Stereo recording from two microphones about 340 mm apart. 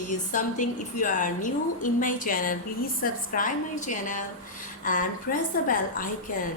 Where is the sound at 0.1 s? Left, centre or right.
Left.